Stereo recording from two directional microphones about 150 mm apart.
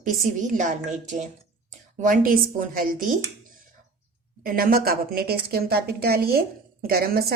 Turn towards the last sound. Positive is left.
turn(degrees=-90)